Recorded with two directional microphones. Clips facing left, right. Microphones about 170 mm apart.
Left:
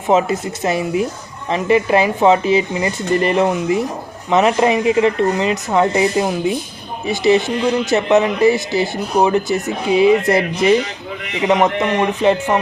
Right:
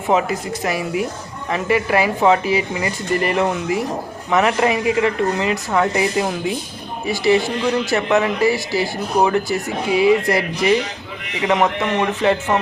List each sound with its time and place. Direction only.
0.1 s speech: 25° left (ahead or behind)